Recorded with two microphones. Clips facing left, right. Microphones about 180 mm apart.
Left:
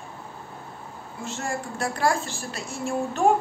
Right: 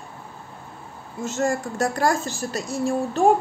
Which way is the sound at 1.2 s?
40° right (ahead or behind).